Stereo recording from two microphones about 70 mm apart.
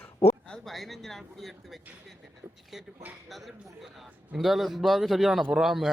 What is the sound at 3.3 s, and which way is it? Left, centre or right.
Speech, centre.